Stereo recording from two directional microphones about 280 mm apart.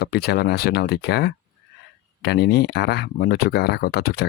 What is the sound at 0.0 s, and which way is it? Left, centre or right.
Speech, left.